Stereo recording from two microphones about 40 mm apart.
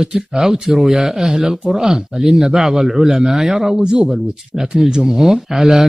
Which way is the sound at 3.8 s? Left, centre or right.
Right.